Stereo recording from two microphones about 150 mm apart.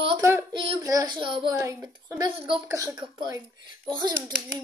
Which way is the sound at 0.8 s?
25° right (ahead or behind).